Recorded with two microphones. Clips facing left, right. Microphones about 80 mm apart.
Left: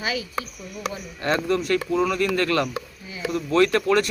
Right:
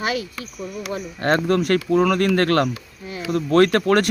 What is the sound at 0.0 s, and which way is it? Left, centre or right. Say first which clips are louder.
Speech: right 3 dB; right.